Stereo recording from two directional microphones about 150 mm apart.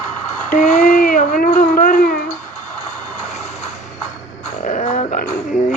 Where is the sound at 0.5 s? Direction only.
60° left (ahead or behind).